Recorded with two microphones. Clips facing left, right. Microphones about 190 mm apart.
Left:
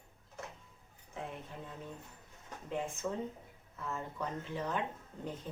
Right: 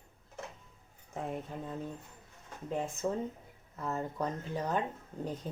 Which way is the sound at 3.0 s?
40° right (ahead or behind).